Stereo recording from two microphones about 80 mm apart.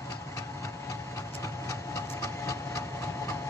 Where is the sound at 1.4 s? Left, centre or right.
Left.